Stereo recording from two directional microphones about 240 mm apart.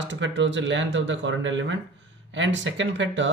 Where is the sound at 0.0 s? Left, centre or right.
Right.